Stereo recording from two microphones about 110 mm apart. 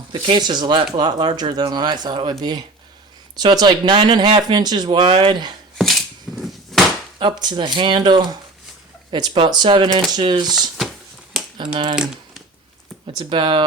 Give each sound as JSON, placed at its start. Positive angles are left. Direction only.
{"t": 0.1, "sound": "speech", "side_deg": -45}
{"t": 5.7, "sound": "a sound", "side_deg": 0}
{"t": 7.2, "sound": "speech", "side_deg": -45}
{"t": 11.5, "sound": "speech", "side_deg": -45}
{"t": 11.9, "sound": "speech", "side_deg": -5}
{"t": 13.1, "sound": "speech", "side_deg": -45}